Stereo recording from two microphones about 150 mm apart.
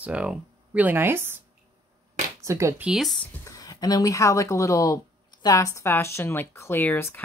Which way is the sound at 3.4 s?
25° left (ahead or behind).